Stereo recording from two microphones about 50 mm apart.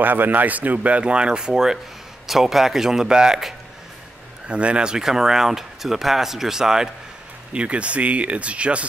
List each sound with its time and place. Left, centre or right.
0.0 s speech: right; by 3.5 s centre
4.5 s speech: right
7.5 s speech: right